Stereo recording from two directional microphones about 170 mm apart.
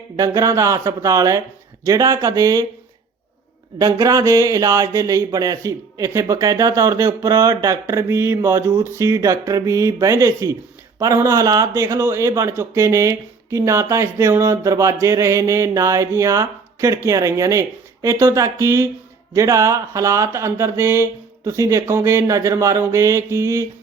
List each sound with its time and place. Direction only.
0.2 s speech: 20° right (ahead or behind)
3.8 s a man's voice: 20° right (ahead or behind)